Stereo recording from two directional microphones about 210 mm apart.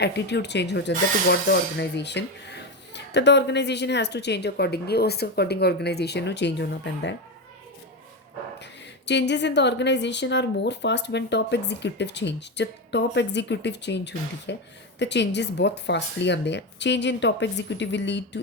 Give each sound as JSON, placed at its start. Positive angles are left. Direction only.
{"t": 0.0, "sound": "speech", "side_deg": 55}
{"t": 9.0, "sound": "speech", "side_deg": 55}